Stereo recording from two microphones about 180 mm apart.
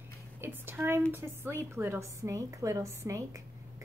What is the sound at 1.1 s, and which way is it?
A woman's voice, 15° right (ahead or behind).